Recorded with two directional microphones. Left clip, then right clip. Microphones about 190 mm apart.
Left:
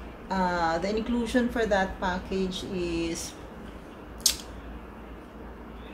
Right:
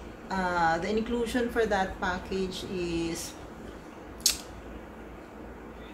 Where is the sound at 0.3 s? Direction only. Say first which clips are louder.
Even; 25° left (ahead or behind).